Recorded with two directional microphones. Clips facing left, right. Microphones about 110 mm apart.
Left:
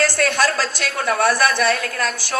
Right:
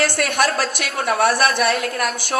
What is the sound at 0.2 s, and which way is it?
A man's voice, 20° right (ahead or behind).